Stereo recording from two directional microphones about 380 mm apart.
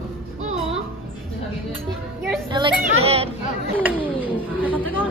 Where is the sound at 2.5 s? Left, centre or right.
Centre.